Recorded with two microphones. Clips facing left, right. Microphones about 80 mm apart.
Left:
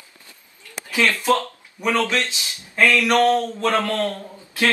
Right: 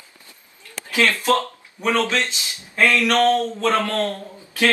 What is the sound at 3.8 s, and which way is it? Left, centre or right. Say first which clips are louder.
Speech: even; right.